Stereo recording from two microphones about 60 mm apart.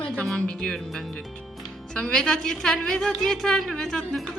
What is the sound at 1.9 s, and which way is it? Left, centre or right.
A woman's voice, centre.